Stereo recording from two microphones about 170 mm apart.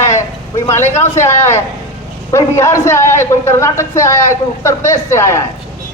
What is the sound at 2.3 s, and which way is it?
Speech, 15° left (ahead or behind).